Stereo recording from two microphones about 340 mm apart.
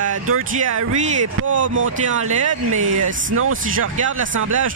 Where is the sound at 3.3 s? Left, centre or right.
Right.